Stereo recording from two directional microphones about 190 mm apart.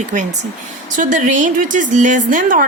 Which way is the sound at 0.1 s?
40° right (ahead or behind).